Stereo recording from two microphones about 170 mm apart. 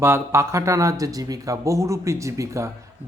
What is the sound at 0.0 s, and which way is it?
A man's voice, 15° right (ahead or behind).